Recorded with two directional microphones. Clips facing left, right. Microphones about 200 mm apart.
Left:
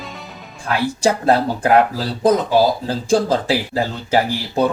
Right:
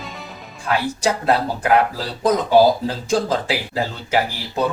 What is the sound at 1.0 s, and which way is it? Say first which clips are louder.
Speech: left 5 dB; 30° left (ahead or behind).